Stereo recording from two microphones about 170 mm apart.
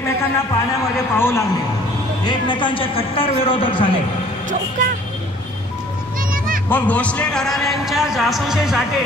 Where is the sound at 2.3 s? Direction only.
30° left (ahead or behind).